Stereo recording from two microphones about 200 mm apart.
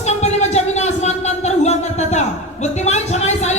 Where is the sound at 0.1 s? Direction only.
35° left (ahead or behind).